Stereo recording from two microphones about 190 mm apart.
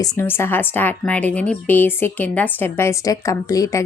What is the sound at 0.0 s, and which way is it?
A woman's voice, 15° left (ahead or behind).